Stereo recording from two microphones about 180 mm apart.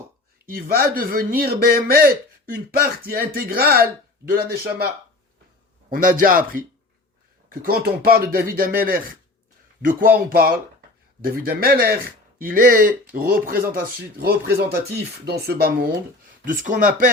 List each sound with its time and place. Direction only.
0.4 s speech: 55° right (ahead or behind)
5.9 s speech: 50° right (ahead or behind)
7.8 s speech: 60° right (ahead or behind)